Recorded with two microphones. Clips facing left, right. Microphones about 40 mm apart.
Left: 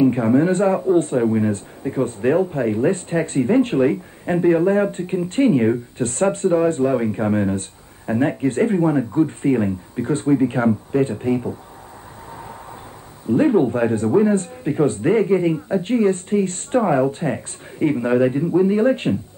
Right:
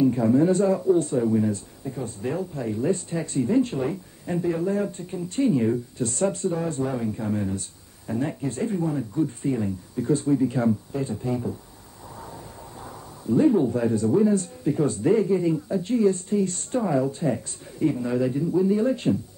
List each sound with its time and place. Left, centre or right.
0.0 s a man's voice: left
13.3 s a man's voice: left